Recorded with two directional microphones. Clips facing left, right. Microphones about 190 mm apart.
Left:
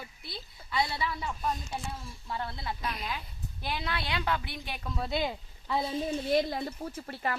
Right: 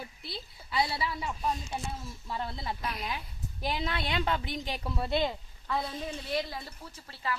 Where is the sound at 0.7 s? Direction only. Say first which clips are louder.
Right 1 dB; 35° right (ahead or behind).